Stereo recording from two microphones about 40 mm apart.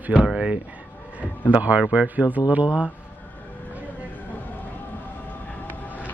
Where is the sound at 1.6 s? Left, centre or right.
Right.